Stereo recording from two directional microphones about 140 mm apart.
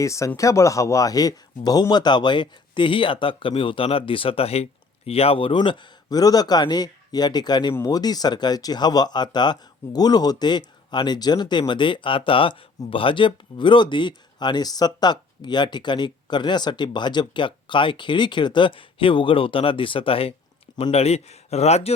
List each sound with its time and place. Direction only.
0.0 s speech: 20° left (ahead or behind); by 21.9 s 50° left (ahead or behind)